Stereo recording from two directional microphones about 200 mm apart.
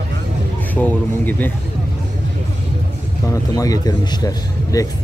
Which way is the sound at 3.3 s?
15° left (ahead or behind).